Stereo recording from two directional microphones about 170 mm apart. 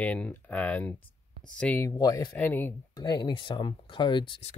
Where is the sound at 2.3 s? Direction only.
10° left (ahead or behind).